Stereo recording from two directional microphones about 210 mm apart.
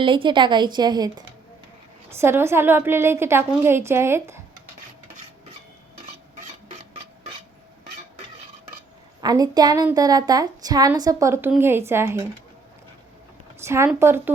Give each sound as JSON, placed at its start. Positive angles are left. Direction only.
{"t": 0.0, "sound": "a woman's voice", "side_deg": -25}
{"t": 9.2, "sound": "a woman's voice", "side_deg": -20}
{"t": 13.7, "sound": "a woman's voice", "side_deg": -10}